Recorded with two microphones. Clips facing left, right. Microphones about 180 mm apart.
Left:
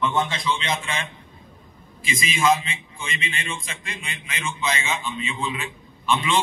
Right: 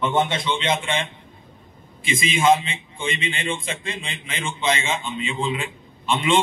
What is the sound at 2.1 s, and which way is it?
A man's voice, 25° right (ahead or behind).